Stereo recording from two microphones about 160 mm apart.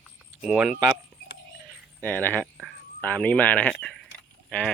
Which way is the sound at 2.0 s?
10° left (ahead or behind).